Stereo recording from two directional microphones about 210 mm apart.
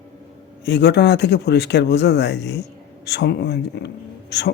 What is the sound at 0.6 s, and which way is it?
A man's voice, 55° left (ahead or behind).